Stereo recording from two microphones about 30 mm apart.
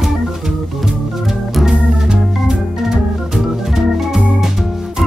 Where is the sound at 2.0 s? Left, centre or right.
Right.